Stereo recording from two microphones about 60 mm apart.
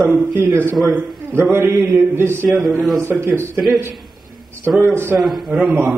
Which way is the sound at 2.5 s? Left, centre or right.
Centre.